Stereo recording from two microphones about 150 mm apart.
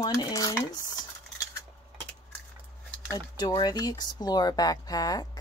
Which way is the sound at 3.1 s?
30° left (ahead or behind).